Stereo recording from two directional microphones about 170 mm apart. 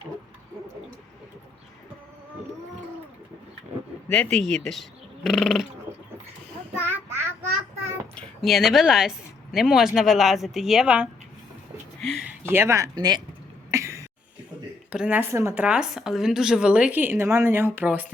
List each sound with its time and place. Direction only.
4.1 s speech: 5° left (ahead or behind)
6.8 s child singing: 15° right (ahead or behind)
8.1 s speech: centre (ahead or behind)
11.9 s a sound: centre (ahead or behind)
12.5 s speech: 15° right (ahead or behind)
13.7 s a sound: 20° right (ahead or behind)
14.8 s a woman's voice: 5° right (ahead or behind)
15.6 s a woman's voice: 5° right (ahead or behind)